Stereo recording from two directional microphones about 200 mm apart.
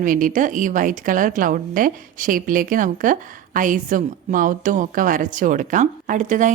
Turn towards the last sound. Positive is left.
turn(degrees=-40)  # may be behind; listen again after turning